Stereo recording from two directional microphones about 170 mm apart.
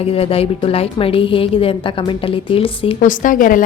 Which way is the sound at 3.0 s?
50° left (ahead or behind).